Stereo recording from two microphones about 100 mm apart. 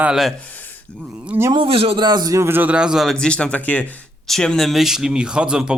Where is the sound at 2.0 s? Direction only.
45° right (ahead or behind).